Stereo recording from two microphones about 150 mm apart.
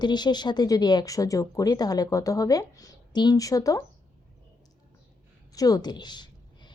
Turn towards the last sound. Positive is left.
turn(degrees=30)  # may be behind; listen again after turning